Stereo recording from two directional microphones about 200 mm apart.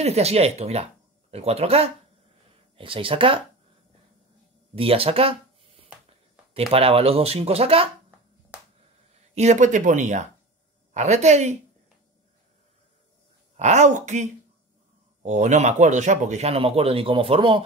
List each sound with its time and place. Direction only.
0.0 s speech: 30° right (ahead or behind)
4.7 s speech: 30° right (ahead or behind)
6.7 s speech: 30° right (ahead or behind)
9.3 s speech: 35° right (ahead or behind)
13.6 s speech: 35° right (ahead or behind)